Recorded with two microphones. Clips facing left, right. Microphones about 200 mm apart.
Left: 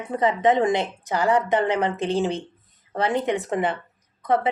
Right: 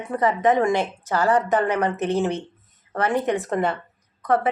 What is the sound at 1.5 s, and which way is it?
Speech, 25° left (ahead or behind).